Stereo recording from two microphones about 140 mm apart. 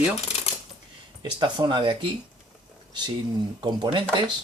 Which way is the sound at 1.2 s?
30° right (ahead or behind).